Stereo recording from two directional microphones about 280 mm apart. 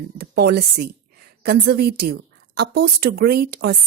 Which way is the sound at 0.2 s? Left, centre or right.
Right.